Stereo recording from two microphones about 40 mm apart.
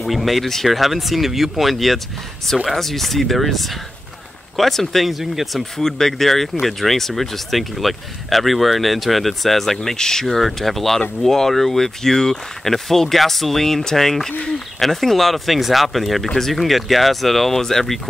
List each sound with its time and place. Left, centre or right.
0.0 s speech: centre
9.9 s speech: centre
10.2 s speech: centre